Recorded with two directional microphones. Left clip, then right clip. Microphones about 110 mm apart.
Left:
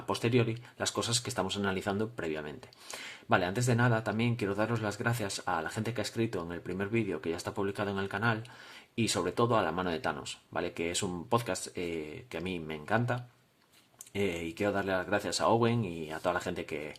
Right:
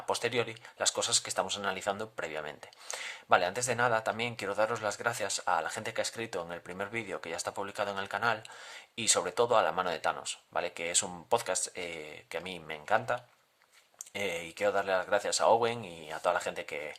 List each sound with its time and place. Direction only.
0.1 s speech: 35° right (ahead or behind)
9.0 s speech: 40° right (ahead or behind)